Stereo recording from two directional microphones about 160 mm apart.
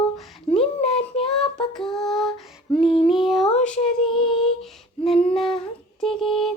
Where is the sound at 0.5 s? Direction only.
40° left (ahead or behind).